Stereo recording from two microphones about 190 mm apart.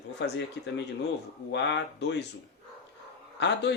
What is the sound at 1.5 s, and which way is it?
Speech, 65° left (ahead or behind).